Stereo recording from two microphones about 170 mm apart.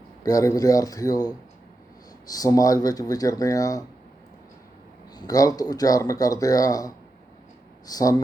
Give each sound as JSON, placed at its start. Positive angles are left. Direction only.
{"t": 0.2, "sound": "speech", "side_deg": 20}
{"t": 5.1, "sound": "speech", "side_deg": 20}